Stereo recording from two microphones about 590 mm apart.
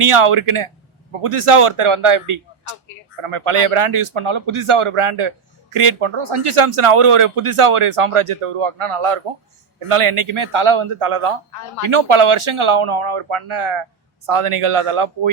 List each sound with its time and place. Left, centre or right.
0.0 s a man's voice: right